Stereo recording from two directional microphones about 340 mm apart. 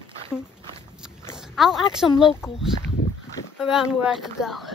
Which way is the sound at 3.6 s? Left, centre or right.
Centre.